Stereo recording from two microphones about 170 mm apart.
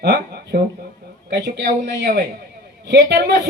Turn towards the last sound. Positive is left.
turn(degrees=-75)  # may be behind; listen again after turning